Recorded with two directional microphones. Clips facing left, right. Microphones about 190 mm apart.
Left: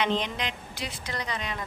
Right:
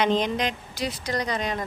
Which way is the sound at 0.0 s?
40° right (ahead or behind).